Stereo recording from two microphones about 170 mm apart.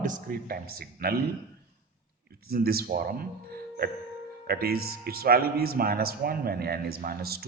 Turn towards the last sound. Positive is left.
turn(degrees=-65)  # may be behind; listen again after turning